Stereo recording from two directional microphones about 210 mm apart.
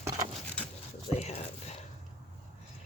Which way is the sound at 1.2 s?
30° left (ahead or behind).